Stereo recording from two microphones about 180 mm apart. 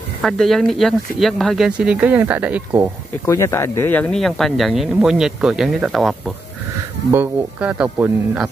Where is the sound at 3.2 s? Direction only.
15° left (ahead or behind).